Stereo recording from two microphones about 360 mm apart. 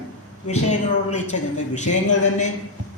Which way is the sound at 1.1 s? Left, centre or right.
Centre.